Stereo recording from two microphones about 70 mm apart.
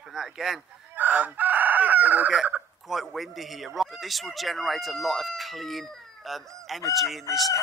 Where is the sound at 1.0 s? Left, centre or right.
Right.